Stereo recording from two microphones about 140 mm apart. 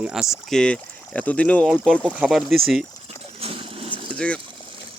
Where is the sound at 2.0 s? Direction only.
5° right (ahead or behind).